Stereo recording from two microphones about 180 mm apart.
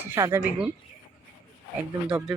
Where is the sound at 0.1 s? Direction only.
15° right (ahead or behind).